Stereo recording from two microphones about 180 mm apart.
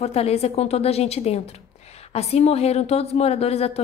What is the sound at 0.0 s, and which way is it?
A woman's voice, 35° left (ahead or behind).